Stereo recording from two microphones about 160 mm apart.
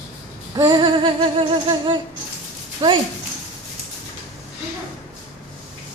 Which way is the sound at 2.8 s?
25° right (ahead or behind).